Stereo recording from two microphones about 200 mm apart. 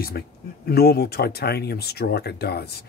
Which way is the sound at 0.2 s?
50° left (ahead or behind).